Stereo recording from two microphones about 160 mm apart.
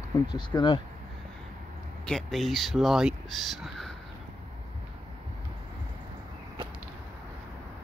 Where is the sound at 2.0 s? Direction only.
Centre (ahead or behind).